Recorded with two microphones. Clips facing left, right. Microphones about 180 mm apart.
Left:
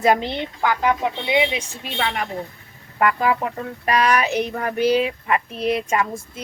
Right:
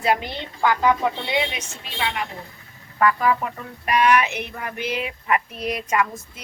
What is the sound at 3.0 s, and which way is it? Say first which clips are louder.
Speech: even; 25° left (ahead or behind).